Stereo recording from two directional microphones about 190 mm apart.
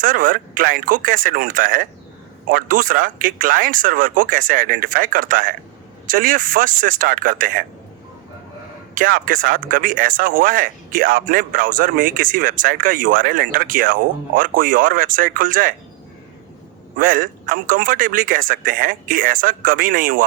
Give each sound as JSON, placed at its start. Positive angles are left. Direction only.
{"t": 0.0, "sound": "speech", "side_deg": -45}
{"t": 9.0, "sound": "speech", "side_deg": -45}
{"t": 17.0, "sound": "speech", "side_deg": -45}